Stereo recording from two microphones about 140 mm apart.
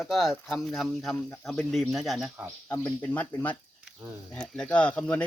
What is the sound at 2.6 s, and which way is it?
Speech, 10° left (ahead or behind).